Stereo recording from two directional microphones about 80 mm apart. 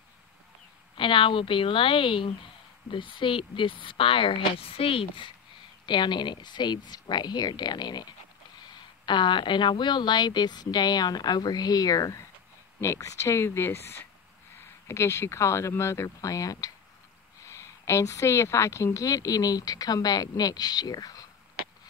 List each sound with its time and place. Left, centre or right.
0.9 s speech: left
5.9 s a woman's voice: left
12.8 s a woman's voice: left